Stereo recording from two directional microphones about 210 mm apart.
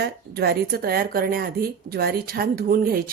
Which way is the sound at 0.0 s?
50° right (ahead or behind).